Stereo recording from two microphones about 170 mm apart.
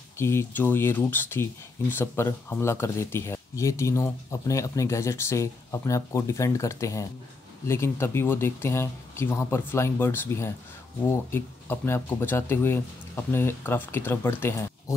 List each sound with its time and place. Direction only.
0.2 s speech: 15° left (ahead or behind)